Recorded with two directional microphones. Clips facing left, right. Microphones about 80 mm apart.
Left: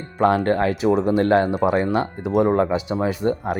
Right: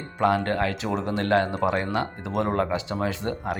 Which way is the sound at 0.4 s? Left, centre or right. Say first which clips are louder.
Left 7 dB; left.